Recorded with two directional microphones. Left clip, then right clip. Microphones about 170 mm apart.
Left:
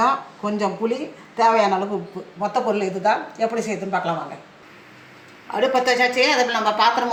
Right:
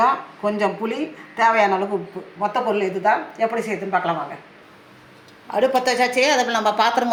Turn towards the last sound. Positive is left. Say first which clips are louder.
# even
turn(degrees=-50)  # may be behind; listen again after turning